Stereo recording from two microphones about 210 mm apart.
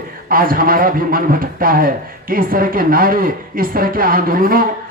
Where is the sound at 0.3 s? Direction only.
45° right (ahead or behind).